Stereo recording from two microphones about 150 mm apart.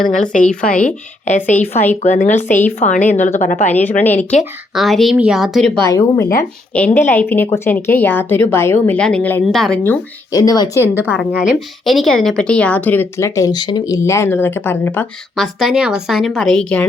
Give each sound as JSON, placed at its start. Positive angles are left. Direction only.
{"t": 0.4, "sound": "speech", "side_deg": 5}
{"t": 0.9, "sound": "a woman's voice", "side_deg": 55}
{"t": 3.7, "sound": "speech", "side_deg": 10}
{"t": 4.7, "sound": "a woman's voice", "side_deg": 0}
{"t": 5.8, "sound": "speech", "side_deg": 20}
{"t": 6.7, "sound": "a woman's voice", "side_deg": 10}
{"t": 10.3, "sound": "speech", "side_deg": 25}
{"t": 10.8, "sound": "a woman's voice", "side_deg": -10}
{"t": 15.4, "sound": "a woman's voice", "side_deg": 0}